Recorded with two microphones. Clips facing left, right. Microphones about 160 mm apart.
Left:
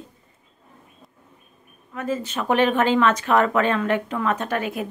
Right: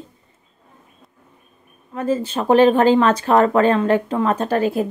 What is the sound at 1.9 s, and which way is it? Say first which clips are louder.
Speech: right 6 dB; 30° right (ahead or behind).